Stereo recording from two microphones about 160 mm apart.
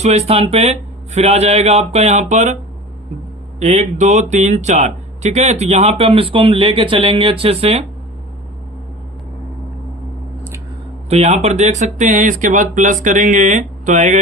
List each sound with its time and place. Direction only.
0.0 s speech: 40° right (ahead or behind)
3.6 s speech: 45° right (ahead or behind)
11.1 s speech: 45° right (ahead or behind)